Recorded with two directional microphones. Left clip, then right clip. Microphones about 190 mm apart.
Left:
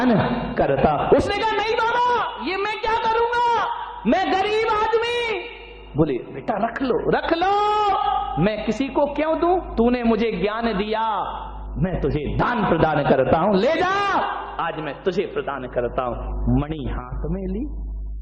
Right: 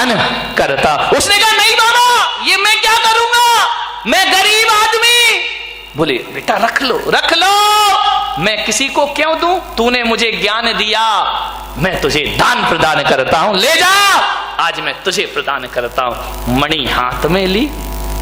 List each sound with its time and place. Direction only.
0.0 s a man's voice: 10° right (ahead or behind)